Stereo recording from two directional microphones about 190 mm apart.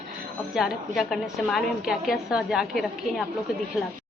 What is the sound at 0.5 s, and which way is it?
A woman's voice, centre (ahead or behind).